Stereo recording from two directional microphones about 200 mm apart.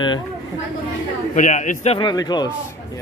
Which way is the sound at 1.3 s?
40° left (ahead or behind).